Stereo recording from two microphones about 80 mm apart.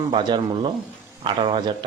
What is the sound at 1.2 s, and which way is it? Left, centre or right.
Speech, right.